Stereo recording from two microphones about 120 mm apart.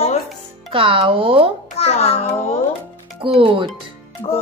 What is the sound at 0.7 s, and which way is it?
Speech, 45° right (ahead or behind).